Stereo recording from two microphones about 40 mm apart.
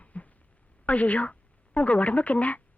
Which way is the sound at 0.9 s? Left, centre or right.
Left.